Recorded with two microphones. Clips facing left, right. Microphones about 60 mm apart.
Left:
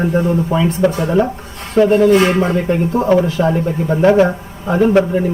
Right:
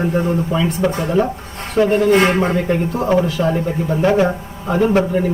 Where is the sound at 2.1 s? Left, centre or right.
Right.